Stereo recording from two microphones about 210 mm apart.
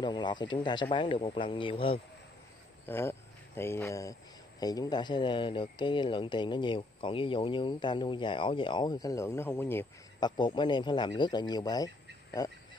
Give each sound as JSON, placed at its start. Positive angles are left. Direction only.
{"t": 0.0, "sound": "speech", "side_deg": 20}
{"t": 2.9, "sound": "speech", "side_deg": 10}
{"t": 10.3, "sound": "speech", "side_deg": 20}